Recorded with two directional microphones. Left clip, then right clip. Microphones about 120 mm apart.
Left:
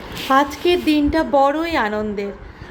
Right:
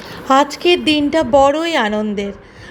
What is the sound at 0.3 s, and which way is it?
A woman's voice, 45° right (ahead or behind).